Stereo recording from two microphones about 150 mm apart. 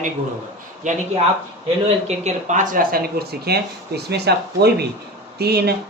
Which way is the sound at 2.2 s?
55° right (ahead or behind).